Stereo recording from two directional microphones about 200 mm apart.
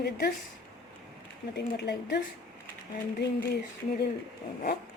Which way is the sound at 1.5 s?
55° left (ahead or behind).